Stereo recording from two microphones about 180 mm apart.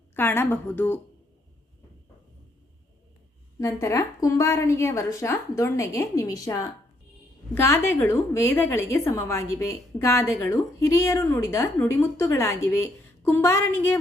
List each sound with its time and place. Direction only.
0.1 s a woman's voice: 10° left (ahead or behind)
3.6 s a woman's voice: 15° left (ahead or behind)